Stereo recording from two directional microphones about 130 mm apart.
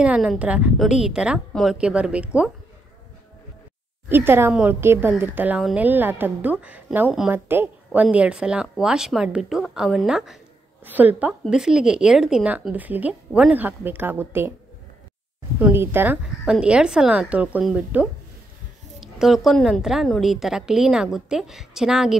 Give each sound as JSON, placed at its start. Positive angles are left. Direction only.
{"t": 0.0, "sound": "a woman's voice", "side_deg": -5}
{"t": 4.1, "sound": "a woman's voice", "side_deg": -15}
{"t": 5.6, "sound": "a woman's voice", "side_deg": -5}
{"t": 5.9, "sound": "a woman's voice", "side_deg": -15}
{"t": 15.6, "sound": "a woman's voice", "side_deg": -15}